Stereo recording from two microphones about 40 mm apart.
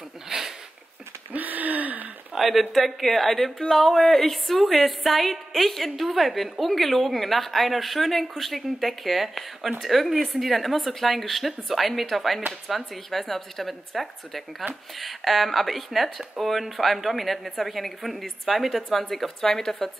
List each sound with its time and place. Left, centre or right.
0.3 s a sound: centre
1.3 s gasp: right
2.3 s a woman's voice: centre